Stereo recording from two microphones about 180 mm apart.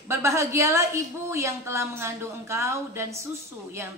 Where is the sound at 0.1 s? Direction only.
15° right (ahead or behind).